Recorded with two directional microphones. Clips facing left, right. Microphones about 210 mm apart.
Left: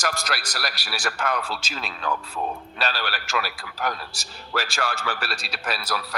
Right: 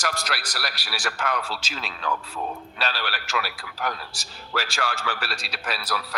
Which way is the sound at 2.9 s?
45° left (ahead or behind).